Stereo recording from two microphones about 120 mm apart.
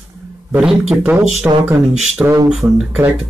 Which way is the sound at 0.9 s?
15° right (ahead or behind).